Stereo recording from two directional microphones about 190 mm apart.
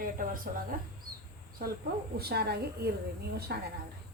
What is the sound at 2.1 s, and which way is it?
A woman's voice, 55° right (ahead or behind).